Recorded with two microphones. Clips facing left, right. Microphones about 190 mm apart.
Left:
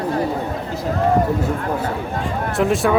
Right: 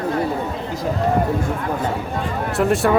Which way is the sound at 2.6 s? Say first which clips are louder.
Even; centre (ahead or behind).